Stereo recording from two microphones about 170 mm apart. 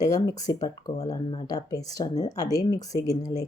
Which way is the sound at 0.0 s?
20° left (ahead or behind).